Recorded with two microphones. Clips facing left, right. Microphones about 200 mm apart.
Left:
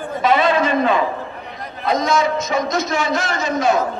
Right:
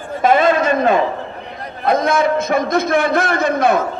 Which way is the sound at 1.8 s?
55° right (ahead or behind).